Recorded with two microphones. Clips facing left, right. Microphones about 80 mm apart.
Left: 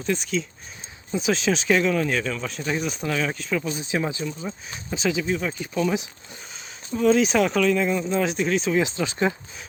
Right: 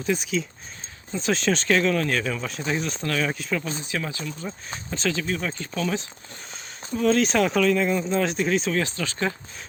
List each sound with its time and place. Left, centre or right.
0.0 s speech: centre
3.8 s speech: left; by 8.7 s centre
8.7 s speech: centre